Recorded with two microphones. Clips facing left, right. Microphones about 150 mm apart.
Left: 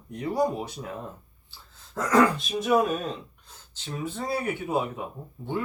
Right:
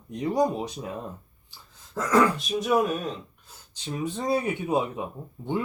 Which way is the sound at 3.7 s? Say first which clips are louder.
Right 3 dB; 20° right (ahead or behind).